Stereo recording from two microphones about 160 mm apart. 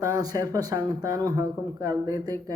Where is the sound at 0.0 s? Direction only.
25° right (ahead or behind).